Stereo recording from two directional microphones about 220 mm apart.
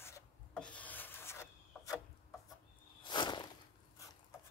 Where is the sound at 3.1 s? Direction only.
20° left (ahead or behind).